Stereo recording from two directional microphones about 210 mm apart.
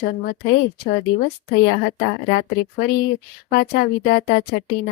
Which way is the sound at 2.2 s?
50° left (ahead or behind).